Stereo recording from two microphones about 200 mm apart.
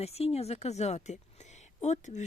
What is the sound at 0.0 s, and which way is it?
Speech, 30° left (ahead or behind).